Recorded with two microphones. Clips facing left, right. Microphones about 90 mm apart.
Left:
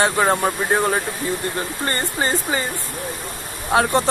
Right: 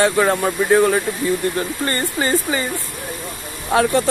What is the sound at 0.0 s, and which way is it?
Speech, 30° left (ahead or behind).